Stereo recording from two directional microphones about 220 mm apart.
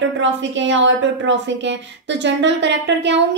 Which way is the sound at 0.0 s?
55° right (ahead or behind).